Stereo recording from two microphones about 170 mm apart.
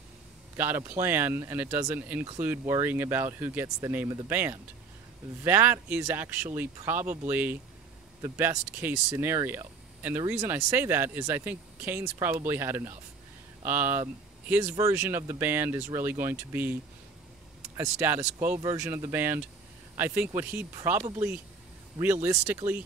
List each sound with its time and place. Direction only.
0.6 s speech: 10° right (ahead or behind)
17.7 s speech: 10° right (ahead or behind)
22.0 s speech: 10° right (ahead or behind)